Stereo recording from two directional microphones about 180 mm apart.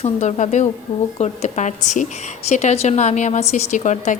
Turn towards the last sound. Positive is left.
turn(degrees=40)  # may be behind; listen again after turning